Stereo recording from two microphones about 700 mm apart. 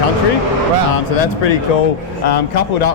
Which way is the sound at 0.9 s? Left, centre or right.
Left.